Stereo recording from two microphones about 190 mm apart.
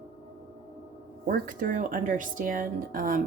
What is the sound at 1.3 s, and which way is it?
Speech, 45° right (ahead or behind).